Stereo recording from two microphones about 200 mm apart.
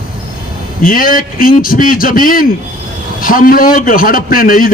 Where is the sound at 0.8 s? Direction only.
45° left (ahead or behind).